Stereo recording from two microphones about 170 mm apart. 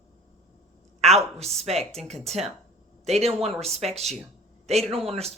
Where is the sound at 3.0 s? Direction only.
40° right (ahead or behind).